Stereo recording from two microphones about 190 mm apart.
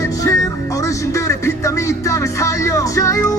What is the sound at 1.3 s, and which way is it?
Music, 15° left (ahead or behind).